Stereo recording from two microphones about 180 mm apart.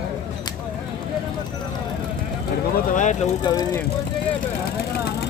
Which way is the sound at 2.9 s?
45° left (ahead or behind).